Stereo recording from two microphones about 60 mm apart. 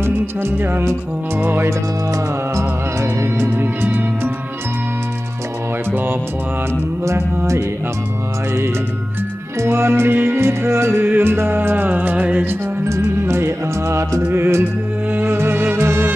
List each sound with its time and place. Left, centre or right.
0.4 s music: right
2.5 s music: right
3.6 s music: right
5.9 s music: right
9.7 s music: right
10.9 s music: right
13.2 s music: right